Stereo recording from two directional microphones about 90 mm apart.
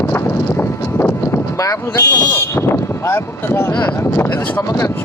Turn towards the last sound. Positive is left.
turn(degrees=30)  # may be behind; listen again after turning